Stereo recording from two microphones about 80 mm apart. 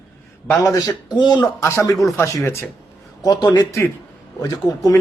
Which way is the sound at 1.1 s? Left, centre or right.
Left.